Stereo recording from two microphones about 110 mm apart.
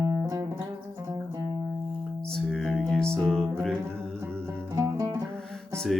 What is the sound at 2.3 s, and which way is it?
Music, 5° left (ahead or behind).